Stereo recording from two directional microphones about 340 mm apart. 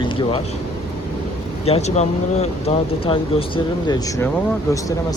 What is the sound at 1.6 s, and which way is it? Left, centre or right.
Speech, centre.